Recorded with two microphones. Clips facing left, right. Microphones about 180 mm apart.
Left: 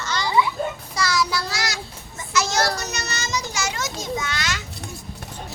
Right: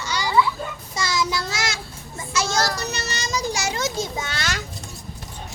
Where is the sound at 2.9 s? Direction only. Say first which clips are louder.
Right 1 dB; 30° right (ahead or behind).